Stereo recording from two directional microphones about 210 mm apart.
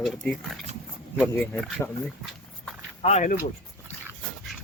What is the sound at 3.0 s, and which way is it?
Speech, 35° left (ahead or behind).